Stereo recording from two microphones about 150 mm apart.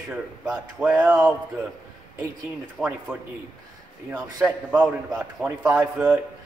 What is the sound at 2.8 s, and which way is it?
Speech, 5° right (ahead or behind).